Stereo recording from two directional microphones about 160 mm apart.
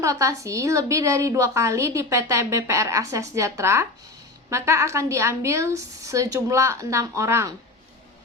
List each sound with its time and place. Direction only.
0.0 s a woman's voice: 20° right (ahead or behind)